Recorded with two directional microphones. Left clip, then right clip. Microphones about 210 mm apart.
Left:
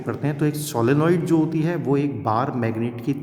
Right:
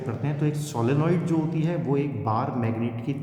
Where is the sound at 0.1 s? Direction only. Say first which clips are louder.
Left 7 dB; 40° left (ahead or behind).